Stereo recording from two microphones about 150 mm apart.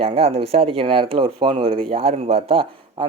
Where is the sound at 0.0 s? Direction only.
40° right (ahead or behind).